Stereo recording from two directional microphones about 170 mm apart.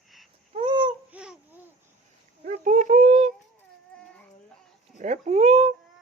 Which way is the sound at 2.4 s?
50° right (ahead or behind).